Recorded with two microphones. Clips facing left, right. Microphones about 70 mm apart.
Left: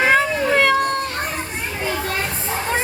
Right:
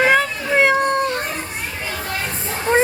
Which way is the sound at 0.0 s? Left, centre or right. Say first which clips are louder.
Right 1 dB; centre.